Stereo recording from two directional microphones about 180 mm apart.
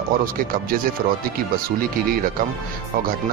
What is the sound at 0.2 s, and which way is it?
Speech, 55° right (ahead or behind).